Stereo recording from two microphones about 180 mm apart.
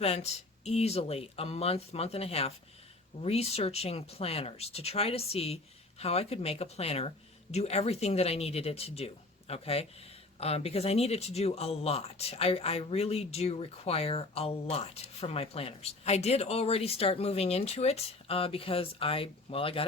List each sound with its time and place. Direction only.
0.0 s speech: 35° left (ahead or behind)